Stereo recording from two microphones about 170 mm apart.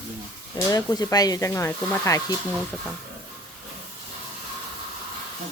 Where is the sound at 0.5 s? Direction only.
20° left (ahead or behind).